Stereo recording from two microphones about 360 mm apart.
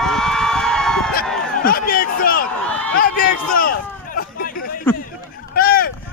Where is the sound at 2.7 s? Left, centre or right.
Centre.